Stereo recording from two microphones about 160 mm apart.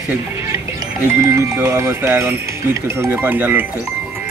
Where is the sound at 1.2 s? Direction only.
15° right (ahead or behind).